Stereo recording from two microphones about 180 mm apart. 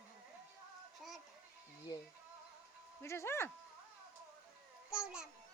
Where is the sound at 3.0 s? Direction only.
15° left (ahead or behind).